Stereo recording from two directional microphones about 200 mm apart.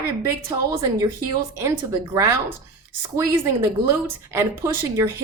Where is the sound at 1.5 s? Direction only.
15° right (ahead or behind).